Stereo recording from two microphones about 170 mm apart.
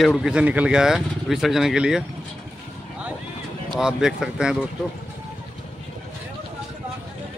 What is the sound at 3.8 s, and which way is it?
Speech, 5° right (ahead or behind).